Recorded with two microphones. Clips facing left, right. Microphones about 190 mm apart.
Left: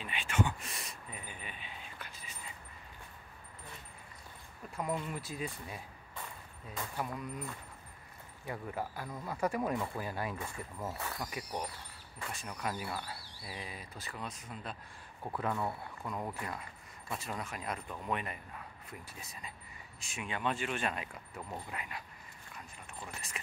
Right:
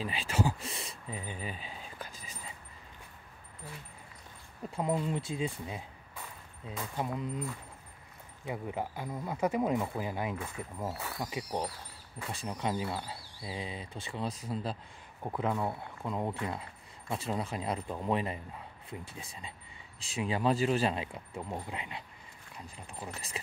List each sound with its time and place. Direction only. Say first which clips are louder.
0.0 s speech: right 2 dB; 35° right (ahead or behind)
4.7 s speech: right 5 dB; 30° right (ahead or behind)
7.0 s speech: right 5 dB; 25° right (ahead or behind)
8.5 s speech: right 3 dB; 15° right (ahead or behind)
10.9 s speech: right 1 dB; 5° right (ahead or behind)
11.2 s speech: right 5 dB; 25° right (ahead or behind)
15.2 s speech: right 3 dB; 20° right (ahead or behind)